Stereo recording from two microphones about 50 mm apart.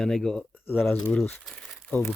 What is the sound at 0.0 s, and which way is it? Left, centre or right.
Speech, centre.